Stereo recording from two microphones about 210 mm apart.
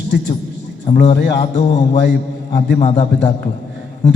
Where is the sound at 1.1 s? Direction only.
55° left (ahead or behind).